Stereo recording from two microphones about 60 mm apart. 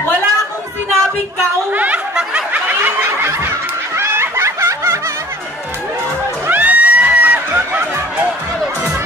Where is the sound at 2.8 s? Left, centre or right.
Right.